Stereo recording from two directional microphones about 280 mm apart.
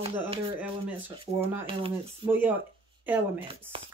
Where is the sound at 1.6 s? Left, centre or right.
Centre.